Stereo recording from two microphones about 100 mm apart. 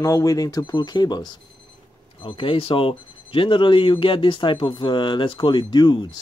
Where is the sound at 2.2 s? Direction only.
60° left (ahead or behind).